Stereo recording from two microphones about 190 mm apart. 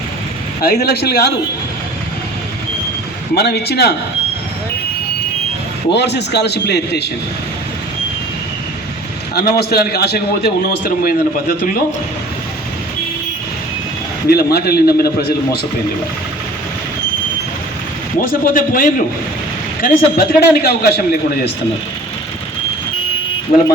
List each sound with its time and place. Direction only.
0.6 s a man's voice: 55° left (ahead or behind)
3.3 s a man's voice: 60° left (ahead or behind)
5.9 s a man's voice: 65° left (ahead or behind)
9.3 s a man's voice: 55° left (ahead or behind)
14.3 s a man's voice: 55° left (ahead or behind)
18.2 s a man's voice: 45° left (ahead or behind)